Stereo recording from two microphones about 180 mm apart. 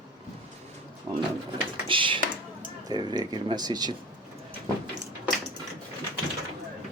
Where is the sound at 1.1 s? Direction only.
20° right (ahead or behind).